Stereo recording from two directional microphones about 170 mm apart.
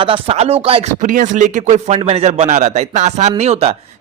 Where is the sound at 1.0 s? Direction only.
50° right (ahead or behind).